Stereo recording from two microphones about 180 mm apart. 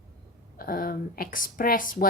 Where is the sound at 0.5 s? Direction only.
55° left (ahead or behind).